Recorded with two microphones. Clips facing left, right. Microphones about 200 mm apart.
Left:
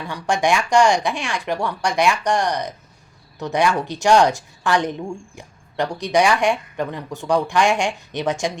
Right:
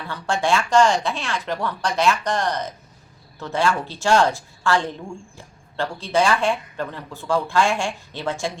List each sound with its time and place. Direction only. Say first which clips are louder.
0.1 s a woman's voice: left 2 dB; 15° left (ahead or behind)